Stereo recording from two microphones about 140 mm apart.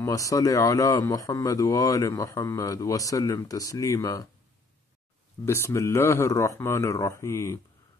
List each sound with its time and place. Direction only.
0.0 s a man's voice: 25° left (ahead or behind)
5.4 s a man's voice: 20° left (ahead or behind)